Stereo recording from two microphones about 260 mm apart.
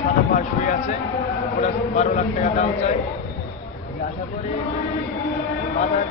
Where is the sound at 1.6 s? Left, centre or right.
Left.